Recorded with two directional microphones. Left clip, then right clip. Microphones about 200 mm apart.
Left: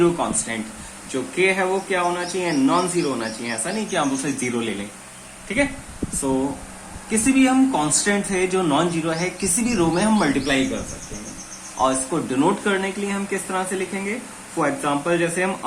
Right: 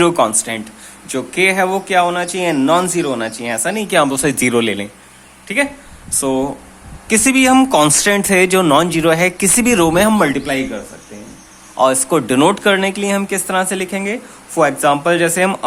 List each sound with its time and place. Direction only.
0.0 s speech: 50° right (ahead or behind)
7.1 s speech: 55° right (ahead or behind); by 10.6 s 40° right (ahead or behind)
11.8 s speech: 50° right (ahead or behind)